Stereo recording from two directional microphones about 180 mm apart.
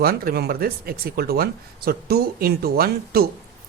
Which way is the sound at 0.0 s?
55° right (ahead or behind).